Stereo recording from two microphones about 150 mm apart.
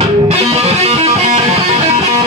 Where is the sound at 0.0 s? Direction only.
45° right (ahead or behind).